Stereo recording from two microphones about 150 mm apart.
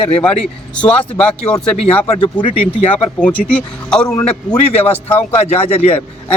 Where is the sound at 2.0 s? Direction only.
35° left (ahead or behind).